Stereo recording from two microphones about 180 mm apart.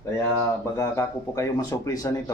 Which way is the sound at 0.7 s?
15° left (ahead or behind).